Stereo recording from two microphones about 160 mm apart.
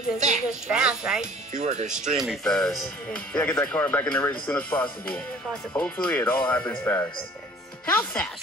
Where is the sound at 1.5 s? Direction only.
45° right (ahead or behind).